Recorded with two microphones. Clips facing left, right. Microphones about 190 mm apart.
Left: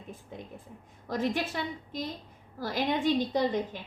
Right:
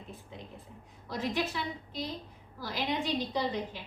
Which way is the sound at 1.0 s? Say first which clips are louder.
Left 3 dB; 50° left (ahead or behind).